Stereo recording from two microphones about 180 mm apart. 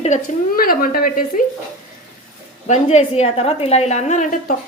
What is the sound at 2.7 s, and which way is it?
A woman's voice, 40° left (ahead or behind).